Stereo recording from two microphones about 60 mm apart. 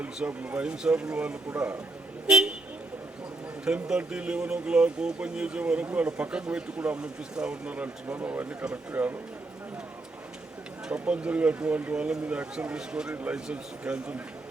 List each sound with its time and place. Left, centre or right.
0.4 s speech: centre
3.7 s speech: centre
8.1 s speech: right
10.8 s speech: centre